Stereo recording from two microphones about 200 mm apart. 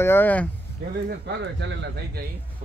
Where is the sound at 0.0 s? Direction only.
10° left (ahead or behind).